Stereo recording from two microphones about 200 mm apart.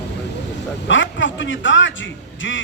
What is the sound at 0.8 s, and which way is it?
A man's voice, 70° left (ahead or behind).